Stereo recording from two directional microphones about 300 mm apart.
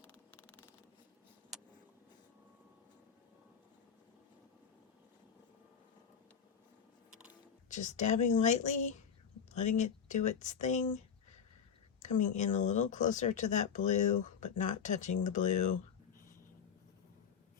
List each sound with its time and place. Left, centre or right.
0.0 s a sound: centre
7.7 s speech: left
11.9 s speech: left